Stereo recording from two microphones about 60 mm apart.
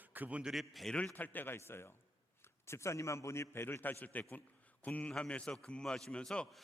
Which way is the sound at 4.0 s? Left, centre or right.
Left.